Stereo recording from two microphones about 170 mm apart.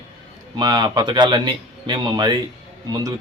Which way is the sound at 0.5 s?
25° right (ahead or behind).